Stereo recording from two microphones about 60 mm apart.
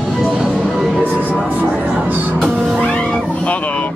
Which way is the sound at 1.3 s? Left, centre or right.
Right.